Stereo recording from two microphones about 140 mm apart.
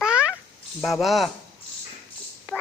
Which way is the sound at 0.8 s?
Centre (ahead or behind).